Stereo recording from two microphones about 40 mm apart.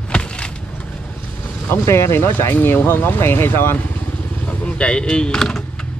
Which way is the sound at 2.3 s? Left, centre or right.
Left.